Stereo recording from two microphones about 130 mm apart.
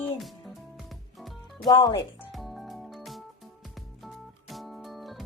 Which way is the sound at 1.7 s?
30° left (ahead or behind).